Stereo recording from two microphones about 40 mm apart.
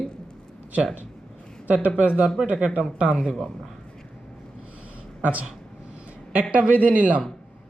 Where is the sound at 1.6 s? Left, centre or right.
Right.